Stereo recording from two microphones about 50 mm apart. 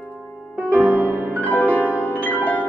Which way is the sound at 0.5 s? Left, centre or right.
Right.